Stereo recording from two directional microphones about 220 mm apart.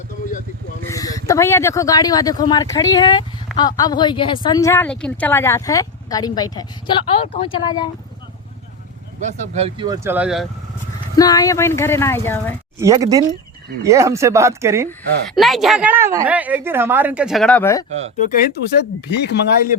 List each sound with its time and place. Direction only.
0.9 s speech: 15° left (ahead or behind)
9.2 s a woman's voice: 25° right (ahead or behind); by 10.5 s centre (ahead or behind)
11.2 s speech: 15° left (ahead or behind)
12.8 s a woman's voice: 15° right (ahead or behind)
15.4 s a woman's voice: centre (ahead or behind)
18.2 s speech: 40° left (ahead or behind)